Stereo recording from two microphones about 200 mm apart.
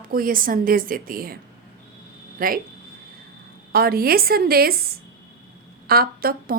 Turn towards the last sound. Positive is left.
turn(degrees=-50)  # may be behind; listen again after turning